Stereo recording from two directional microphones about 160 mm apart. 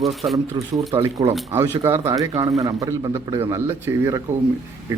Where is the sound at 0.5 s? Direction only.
25° right (ahead or behind).